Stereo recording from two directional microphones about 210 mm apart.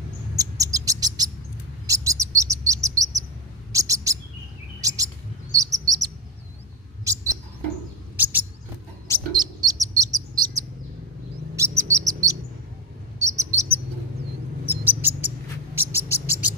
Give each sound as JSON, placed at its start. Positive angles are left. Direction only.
{"t": 0.4, "sound": "bird", "side_deg": -15}
{"t": 4.8, "sound": "chirp", "side_deg": -15}
{"t": 7.1, "sound": "mouse", "side_deg": -15}
{"t": 8.2, "sound": "bird", "side_deg": -10}
{"t": 9.3, "sound": "bird", "side_deg": -20}
{"t": 11.5, "sound": "chirp", "side_deg": -15}
{"t": 12.1, "sound": "bird", "side_deg": -15}
{"t": 13.2, "sound": "chirp", "side_deg": -15}
{"t": 14.7, "sound": "owl", "side_deg": -10}